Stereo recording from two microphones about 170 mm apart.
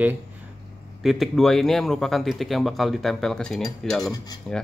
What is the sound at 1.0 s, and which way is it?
Speech, centre (ahead or behind).